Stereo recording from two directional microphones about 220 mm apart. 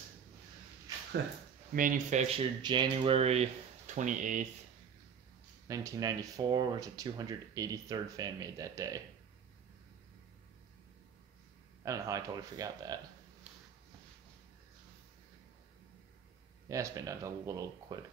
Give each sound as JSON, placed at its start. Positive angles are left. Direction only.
{"t": 1.8, "sound": "speech", "side_deg": -35}
{"t": 5.7, "sound": "speech", "side_deg": -15}
{"t": 11.8, "sound": "speech", "side_deg": -15}
{"t": 16.6, "sound": "speech", "side_deg": -15}